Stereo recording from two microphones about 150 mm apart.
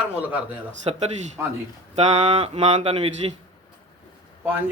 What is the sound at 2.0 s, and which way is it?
Speech, 45° right (ahead or behind).